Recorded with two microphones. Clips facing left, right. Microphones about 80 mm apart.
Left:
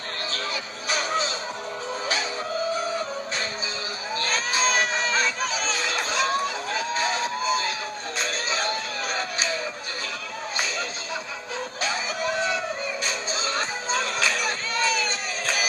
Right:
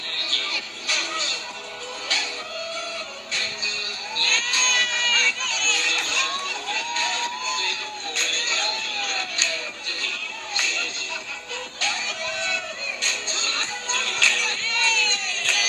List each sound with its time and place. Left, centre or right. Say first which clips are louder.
0.3 s music: left 1 dB; left
4.2 s a sound: left 2 dB; centre
8.2 s music: left 3 dB; centre